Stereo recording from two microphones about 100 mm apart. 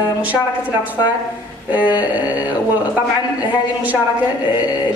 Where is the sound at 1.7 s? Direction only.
15° right (ahead or behind).